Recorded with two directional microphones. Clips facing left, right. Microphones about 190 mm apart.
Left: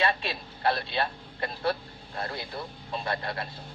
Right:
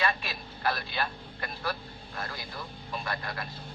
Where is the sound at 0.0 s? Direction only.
25° left (ahead or behind).